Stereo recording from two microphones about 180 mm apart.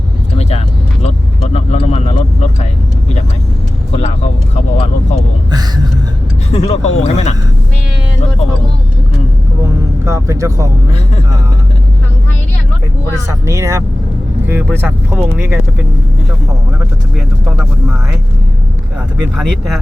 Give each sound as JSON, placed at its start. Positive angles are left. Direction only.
{"t": 0.3, "sound": "vehicle", "side_deg": 35}
{"t": 3.9, "sound": "vehicle", "side_deg": 40}
{"t": 5.5, "sound": "a sound", "side_deg": -20}
{"t": 6.5, "sound": "speech", "side_deg": 35}
{"t": 10.0, "sound": "speech", "side_deg": -15}
{"t": 13.4, "sound": "speech", "side_deg": -15}
{"t": 19.4, "sound": "speech", "side_deg": 0}